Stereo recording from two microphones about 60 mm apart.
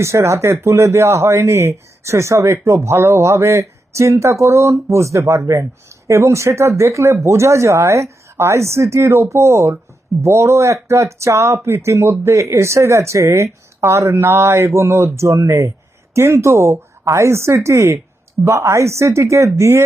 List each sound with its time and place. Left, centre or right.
0.0 s speech: right
16.1 s speech: right